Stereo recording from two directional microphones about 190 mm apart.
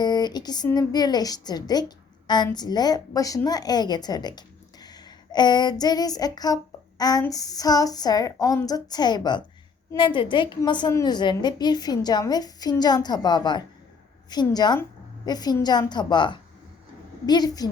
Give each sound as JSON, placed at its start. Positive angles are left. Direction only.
{"t": 0.0, "sound": "a woman's voice", "side_deg": 20}